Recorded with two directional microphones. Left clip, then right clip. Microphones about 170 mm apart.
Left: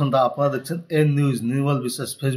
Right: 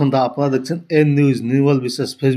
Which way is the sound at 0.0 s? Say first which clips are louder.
Right 2 dB; 20° right (ahead or behind).